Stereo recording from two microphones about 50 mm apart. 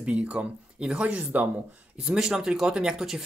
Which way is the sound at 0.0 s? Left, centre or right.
Right.